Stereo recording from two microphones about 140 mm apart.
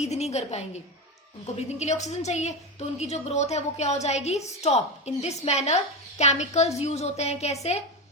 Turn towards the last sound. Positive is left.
turn(degrees=50)  # may be behind; listen again after turning